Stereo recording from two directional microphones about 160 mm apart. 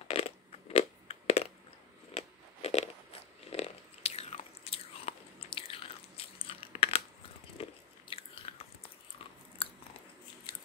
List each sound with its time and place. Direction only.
0.1 s crushing: 40° left (ahead or behind)
2.1 s biting: 40° left (ahead or behind)